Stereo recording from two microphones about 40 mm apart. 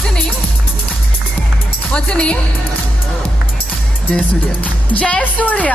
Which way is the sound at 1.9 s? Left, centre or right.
Left.